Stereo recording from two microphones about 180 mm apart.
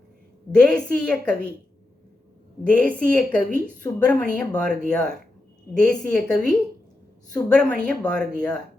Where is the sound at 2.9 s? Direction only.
50° right (ahead or behind).